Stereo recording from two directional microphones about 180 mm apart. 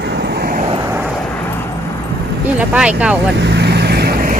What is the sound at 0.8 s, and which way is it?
Vehicle, 10° right (ahead or behind).